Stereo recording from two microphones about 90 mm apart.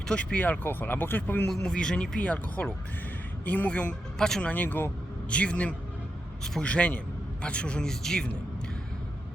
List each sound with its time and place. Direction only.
0.1 s speech: 10° left (ahead or behind)
1.5 s speech: 10° left (ahead or behind)